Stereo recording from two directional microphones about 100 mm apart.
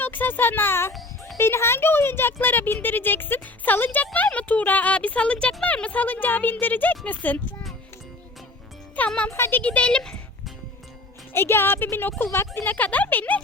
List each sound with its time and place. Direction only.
0.0 s a child's voice: 20° left (ahead or behind)
9.0 s speech: 10° left (ahead or behind)
11.3 s speech: 25° left (ahead or behind)